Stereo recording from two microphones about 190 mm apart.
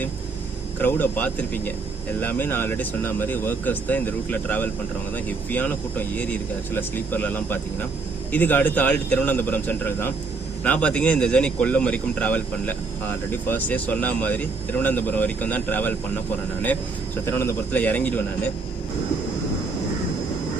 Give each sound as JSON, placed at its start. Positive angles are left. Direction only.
{"t": 0.8, "sound": "speech", "side_deg": 10}
{"t": 17.2, "sound": "speech", "side_deg": 10}